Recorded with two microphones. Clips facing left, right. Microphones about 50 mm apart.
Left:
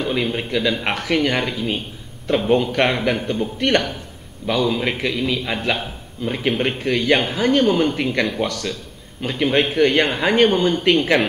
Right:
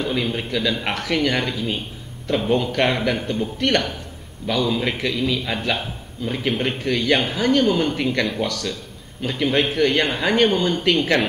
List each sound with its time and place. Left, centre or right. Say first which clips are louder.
0.0 s speech: left 2 dB; centre
10.0 s speech: left 2 dB; centre